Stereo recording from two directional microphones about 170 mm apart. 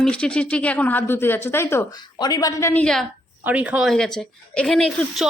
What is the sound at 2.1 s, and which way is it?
Speech, 25° left (ahead or behind).